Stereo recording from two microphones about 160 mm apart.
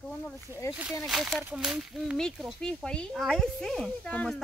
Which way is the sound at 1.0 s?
Centre (ahead or behind).